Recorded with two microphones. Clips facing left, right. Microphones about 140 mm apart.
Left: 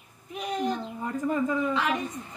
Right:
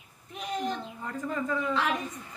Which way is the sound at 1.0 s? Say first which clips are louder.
Left 7 dB; 15° left (ahead or behind).